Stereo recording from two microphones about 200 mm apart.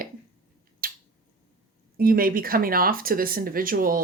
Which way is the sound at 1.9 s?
45° right (ahead or behind).